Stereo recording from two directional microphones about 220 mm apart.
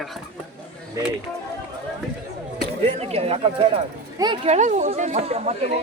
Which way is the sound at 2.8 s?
25° right (ahead or behind).